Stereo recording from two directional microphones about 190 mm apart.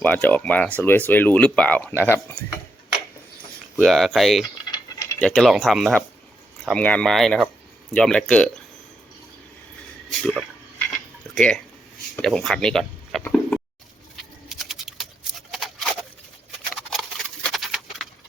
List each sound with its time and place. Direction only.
0.0 s speech: 10° left (ahead or behind)
3.8 s speech: centre (ahead or behind)
4.7 s a sound: 15° left (ahead or behind)
5.2 s speech: centre (ahead or behind)
10.1 s speech: centre (ahead or behind)
14.5 s a sound: centre (ahead or behind)